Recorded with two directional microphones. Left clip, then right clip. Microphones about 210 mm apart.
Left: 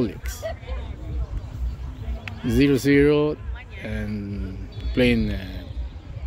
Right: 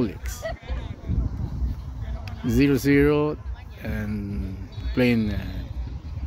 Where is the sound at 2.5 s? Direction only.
5° right (ahead or behind).